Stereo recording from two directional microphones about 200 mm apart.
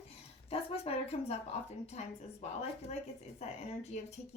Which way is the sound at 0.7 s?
30° left (ahead or behind).